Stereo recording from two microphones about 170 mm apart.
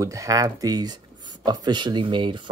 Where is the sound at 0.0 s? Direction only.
20° right (ahead or behind).